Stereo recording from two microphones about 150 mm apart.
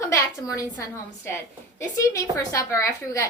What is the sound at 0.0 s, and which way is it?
A woman's voice, 20° left (ahead or behind).